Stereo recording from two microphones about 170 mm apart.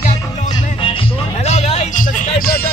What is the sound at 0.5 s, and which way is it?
Music, 30° left (ahead or behind).